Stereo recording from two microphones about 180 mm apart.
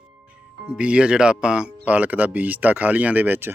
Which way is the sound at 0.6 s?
5° right (ahead or behind).